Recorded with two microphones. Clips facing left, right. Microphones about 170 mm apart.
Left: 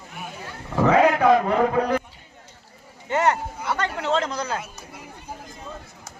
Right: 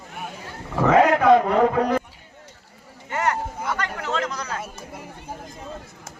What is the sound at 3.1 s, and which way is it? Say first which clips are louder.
Speech: left 3 dB; 25° left (ahead or behind).